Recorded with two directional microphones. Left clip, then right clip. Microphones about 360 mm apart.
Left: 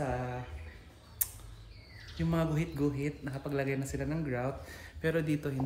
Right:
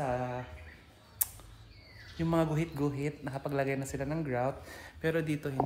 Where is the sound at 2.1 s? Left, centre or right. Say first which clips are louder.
Right 3 dB; centre.